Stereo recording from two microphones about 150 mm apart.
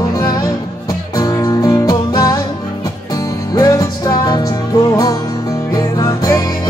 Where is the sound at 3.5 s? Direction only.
25° left (ahead or behind).